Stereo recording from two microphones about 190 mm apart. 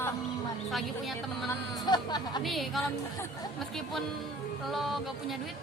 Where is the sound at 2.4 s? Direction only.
Centre (ahead or behind).